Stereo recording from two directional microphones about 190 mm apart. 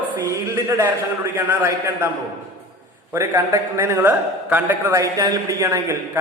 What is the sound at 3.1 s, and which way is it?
A man's voice, 15° right (ahead or behind).